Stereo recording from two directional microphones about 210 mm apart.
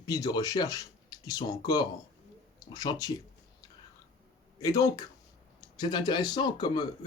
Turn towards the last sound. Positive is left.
turn(degrees=20)  # may be behind; listen again after turning